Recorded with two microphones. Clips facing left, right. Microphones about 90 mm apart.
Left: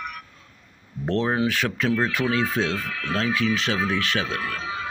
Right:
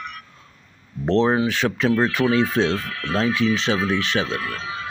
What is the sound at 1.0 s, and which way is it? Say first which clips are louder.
Speech: right 4 dB; 30° right (ahead or behind).